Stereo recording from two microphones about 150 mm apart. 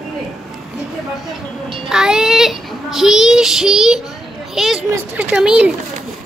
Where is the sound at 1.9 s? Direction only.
5° right (ahead or behind).